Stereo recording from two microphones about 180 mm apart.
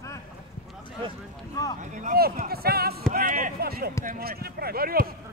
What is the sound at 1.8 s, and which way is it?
Speech, 45° right (ahead or behind).